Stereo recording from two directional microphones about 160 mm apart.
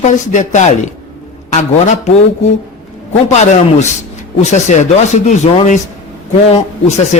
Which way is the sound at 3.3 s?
45° left (ahead or behind).